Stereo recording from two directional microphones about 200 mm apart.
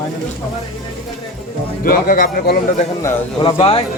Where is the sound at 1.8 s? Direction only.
45° left (ahead or behind).